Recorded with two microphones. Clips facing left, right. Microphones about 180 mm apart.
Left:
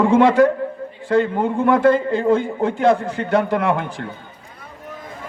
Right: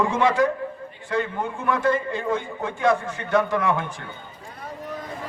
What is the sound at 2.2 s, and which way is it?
Speech, 30° left (ahead or behind).